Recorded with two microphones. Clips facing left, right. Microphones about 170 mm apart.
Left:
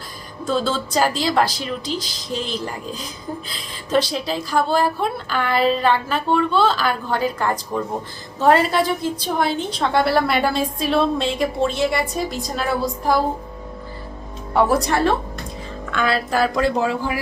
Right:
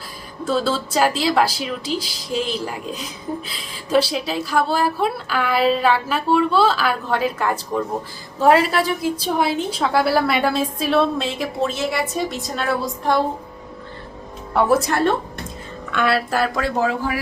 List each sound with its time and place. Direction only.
0.4 s a woman's voice: 5° right (ahead or behind)
14.5 s a woman's voice: centre (ahead or behind)